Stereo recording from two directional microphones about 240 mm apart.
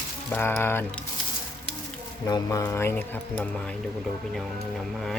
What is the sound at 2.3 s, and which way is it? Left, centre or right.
Speech, centre.